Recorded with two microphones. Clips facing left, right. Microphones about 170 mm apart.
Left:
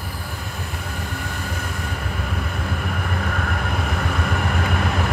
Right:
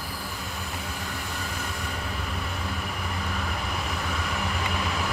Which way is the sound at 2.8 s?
60° left (ahead or behind).